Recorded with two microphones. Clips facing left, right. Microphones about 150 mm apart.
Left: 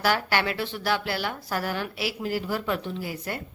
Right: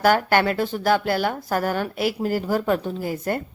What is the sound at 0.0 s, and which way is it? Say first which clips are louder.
A woman's voice: right 7 dB; 50° right (ahead or behind).